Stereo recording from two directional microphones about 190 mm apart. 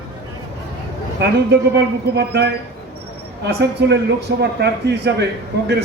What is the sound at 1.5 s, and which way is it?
A man's voice, 60° right (ahead or behind).